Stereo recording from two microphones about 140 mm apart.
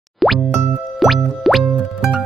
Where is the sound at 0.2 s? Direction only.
Centre (ahead or behind).